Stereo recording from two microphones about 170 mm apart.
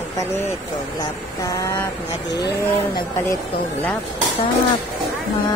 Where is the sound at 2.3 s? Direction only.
90° left.